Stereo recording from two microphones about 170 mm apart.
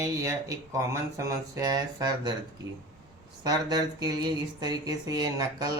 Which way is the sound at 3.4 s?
25° right (ahead or behind).